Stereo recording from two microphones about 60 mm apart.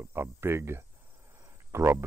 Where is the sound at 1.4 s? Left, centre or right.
Right.